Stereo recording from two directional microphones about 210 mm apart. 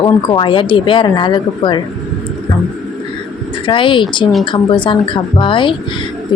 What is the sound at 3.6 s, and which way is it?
Speech, 25° left (ahead or behind).